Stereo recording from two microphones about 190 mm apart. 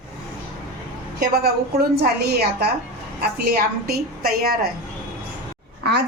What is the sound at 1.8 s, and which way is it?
Speech, 55° right (ahead or behind).